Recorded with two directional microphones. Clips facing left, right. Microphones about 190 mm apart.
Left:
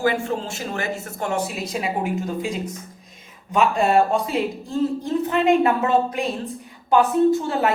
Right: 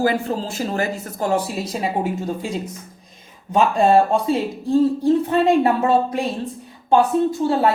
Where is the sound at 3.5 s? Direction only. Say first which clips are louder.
Right 3 dB; 30° right (ahead or behind).